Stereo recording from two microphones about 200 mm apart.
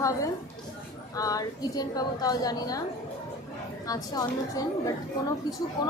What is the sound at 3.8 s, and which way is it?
A woman's voice, 20° left (ahead or behind).